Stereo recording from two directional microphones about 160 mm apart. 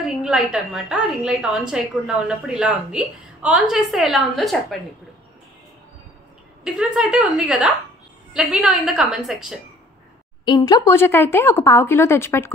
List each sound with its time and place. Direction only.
0.0 s a woman's voice: 5° right (ahead or behind)
6.6 s a woman's voice: 5° right (ahead or behind)
10.4 s speech: 25° left (ahead or behind)